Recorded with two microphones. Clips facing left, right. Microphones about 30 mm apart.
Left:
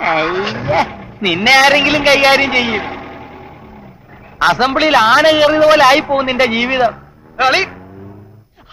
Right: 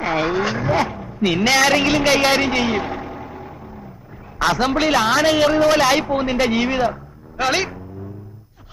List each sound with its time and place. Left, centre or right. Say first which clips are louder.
0.0 s a man's voice: left 5 dB; left